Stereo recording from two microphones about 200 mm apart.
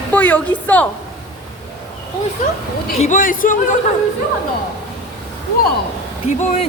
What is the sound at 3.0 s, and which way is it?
Speech, 40° left (ahead or behind).